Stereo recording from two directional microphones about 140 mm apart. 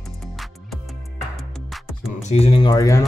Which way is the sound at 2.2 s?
50° left (ahead or behind).